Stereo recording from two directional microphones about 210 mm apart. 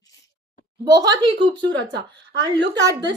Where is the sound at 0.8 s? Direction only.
20° right (ahead or behind).